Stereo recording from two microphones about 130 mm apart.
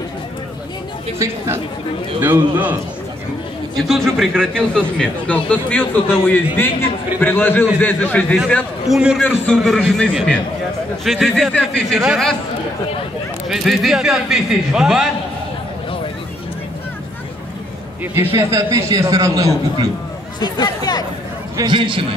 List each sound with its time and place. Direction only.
2.1 s a man's voice: 15° right (ahead or behind)
3.8 s a man's voice: centre (ahead or behind)
8.8 s a man's voice: centre (ahead or behind)
9.2 s a man's voice: 15° left (ahead or behind)
9.6 s a man's voice: 5° left (ahead or behind)
13.5 s a man's voice: centre (ahead or behind)
18.1 s a man's voice: 20° right (ahead or behind)
20.3 s speech: 30° left (ahead or behind)
21.5 s a man's voice: 40° right (ahead or behind)